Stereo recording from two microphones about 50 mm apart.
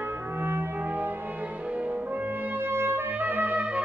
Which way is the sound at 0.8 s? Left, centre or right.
Right.